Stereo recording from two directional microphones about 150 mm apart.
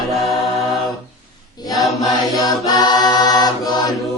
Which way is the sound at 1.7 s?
Centre (ahead or behind).